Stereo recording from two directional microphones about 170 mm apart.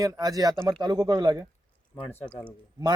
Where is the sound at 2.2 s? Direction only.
5° left (ahead or behind).